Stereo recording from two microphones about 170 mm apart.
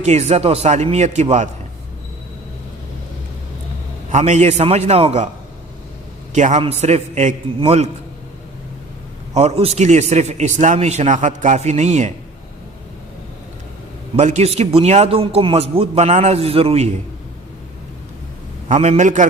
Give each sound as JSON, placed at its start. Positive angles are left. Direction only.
{"t": 0.0, "sound": "a man's voice", "side_deg": -40}
{"t": 4.1, "sound": "a man's voice", "side_deg": -40}
{"t": 6.3, "sound": "a man's voice", "side_deg": -45}
{"t": 9.3, "sound": "a man's voice", "side_deg": -40}
{"t": 14.2, "sound": "a man's voice", "side_deg": -40}
{"t": 18.7, "sound": "a man's voice", "side_deg": -40}